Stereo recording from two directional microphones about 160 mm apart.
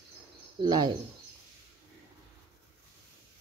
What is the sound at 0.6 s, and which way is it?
Speech, 25° right (ahead or behind).